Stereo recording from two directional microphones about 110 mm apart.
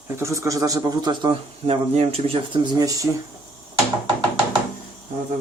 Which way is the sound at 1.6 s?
65° right (ahead or behind).